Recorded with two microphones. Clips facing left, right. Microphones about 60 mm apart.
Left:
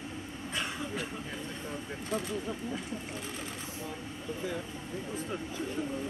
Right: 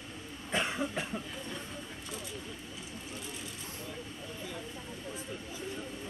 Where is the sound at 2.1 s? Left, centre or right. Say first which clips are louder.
Left 12 dB; left.